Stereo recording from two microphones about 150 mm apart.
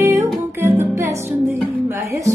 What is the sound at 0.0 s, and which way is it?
Music, 15° right (ahead or behind).